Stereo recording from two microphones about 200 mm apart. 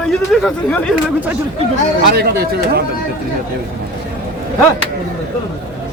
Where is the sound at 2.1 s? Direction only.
55° right (ahead or behind).